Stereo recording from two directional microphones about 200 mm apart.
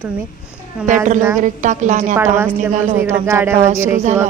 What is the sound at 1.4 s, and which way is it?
Speech, 40° right (ahead or behind).